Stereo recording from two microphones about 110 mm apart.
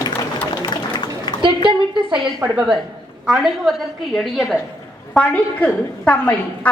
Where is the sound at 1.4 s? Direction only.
50° right (ahead or behind).